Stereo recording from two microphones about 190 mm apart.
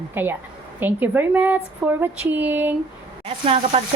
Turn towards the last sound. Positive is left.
turn(degrees=-35)  # may be behind; listen again after turning